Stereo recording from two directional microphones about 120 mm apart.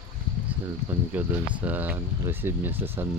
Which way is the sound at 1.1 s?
15° right (ahead or behind).